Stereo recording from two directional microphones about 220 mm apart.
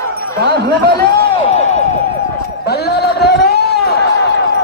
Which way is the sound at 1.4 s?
25° left (ahead or behind).